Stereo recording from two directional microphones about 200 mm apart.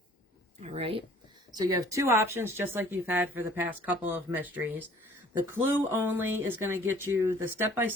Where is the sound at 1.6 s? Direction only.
15° right (ahead or behind).